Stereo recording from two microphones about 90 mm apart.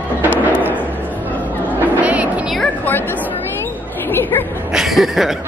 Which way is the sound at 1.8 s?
15° right (ahead or behind).